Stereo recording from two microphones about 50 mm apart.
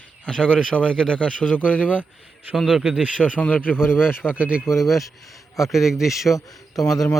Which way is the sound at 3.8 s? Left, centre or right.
Left.